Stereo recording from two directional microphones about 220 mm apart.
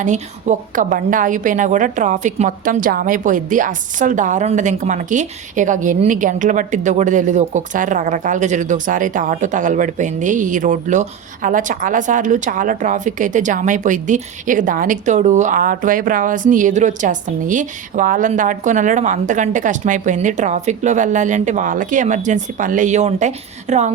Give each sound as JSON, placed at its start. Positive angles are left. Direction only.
{"t": 0.0, "sound": "a woman's voice", "side_deg": -35}